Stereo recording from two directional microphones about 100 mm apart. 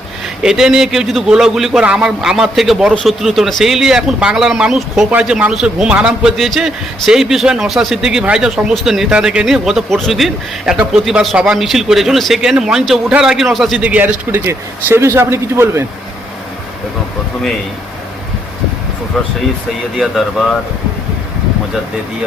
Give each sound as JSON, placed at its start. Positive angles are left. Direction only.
{"t": 0.4, "sound": "a man's voice", "side_deg": -5}
{"t": 13.7, "sound": "speech", "side_deg": -15}
{"t": 19.1, "sound": "a man's voice", "side_deg": 5}